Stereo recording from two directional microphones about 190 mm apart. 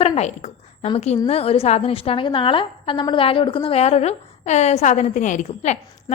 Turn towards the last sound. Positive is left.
turn(degrees=40)  # may be behind; listen again after turning